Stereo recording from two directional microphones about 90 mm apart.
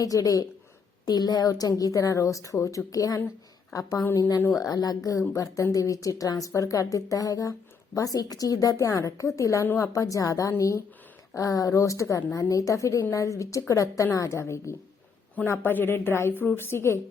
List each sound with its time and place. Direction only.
0.0 s a woman's voice: 40° left (ahead or behind)
15.5 s a woman's voice: 20° left (ahead or behind)